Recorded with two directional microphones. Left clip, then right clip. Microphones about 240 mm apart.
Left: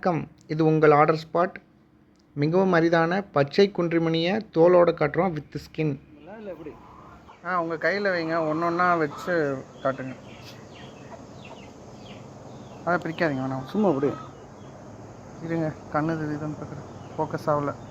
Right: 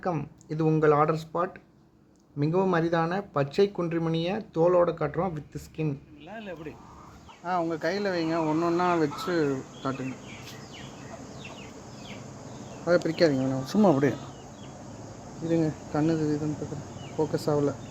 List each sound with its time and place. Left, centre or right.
0.0 s speech: centre
7.4 s speech: centre
12.8 s speech: centre
13.7 s speech: right
15.4 s speech: centre
17.2 s speech: centre